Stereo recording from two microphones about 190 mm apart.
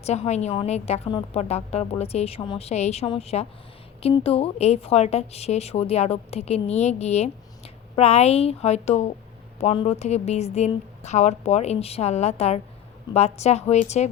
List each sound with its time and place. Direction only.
0.0 s a woman's voice: 35° left (ahead or behind)